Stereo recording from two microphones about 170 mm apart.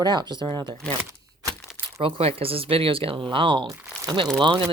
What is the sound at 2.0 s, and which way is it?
Speech, 35° right (ahead or behind).